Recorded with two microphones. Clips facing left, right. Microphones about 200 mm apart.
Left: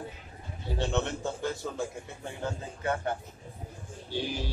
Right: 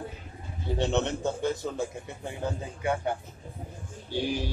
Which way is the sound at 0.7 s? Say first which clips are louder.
Right 3 dB; 20° right (ahead or behind).